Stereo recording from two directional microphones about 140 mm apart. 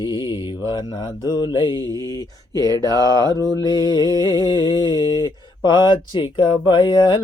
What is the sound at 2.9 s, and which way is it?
Music, 25° left (ahead or behind).